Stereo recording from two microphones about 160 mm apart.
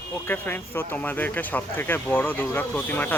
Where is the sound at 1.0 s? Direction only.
10° left (ahead or behind).